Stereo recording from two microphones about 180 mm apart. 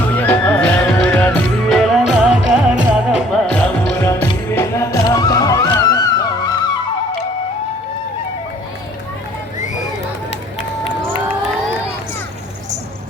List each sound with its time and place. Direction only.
0.1 s music: 10° left (ahead or behind)
3.5 s music: 10° left (ahead or behind)